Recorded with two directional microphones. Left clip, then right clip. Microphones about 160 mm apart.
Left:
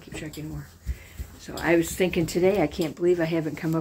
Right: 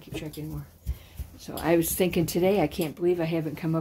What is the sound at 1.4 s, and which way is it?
Speech, 40° right (ahead or behind).